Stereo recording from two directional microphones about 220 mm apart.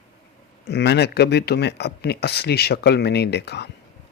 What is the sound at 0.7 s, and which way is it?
Speech, 50° left (ahead or behind).